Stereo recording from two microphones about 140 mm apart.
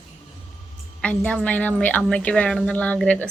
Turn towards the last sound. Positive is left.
turn(degrees=10)  # may be behind; listen again after turning